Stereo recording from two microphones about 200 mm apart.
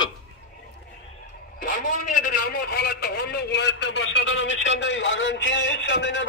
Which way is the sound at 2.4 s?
50° left (ahead or behind).